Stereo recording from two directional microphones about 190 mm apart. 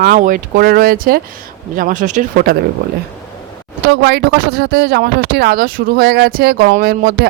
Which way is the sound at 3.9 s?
60° right (ahead or behind).